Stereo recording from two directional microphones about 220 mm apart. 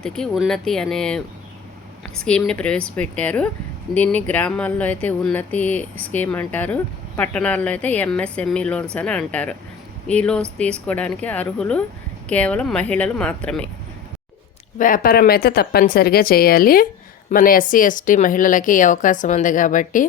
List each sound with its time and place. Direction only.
0.0 s a woman's voice: centre (ahead or behind)
14.8 s a woman's voice: 40° left (ahead or behind)